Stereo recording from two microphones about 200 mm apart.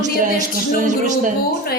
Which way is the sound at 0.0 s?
40° right (ahead or behind).